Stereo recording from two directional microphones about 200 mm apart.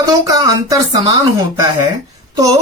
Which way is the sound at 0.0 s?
20° right (ahead or behind).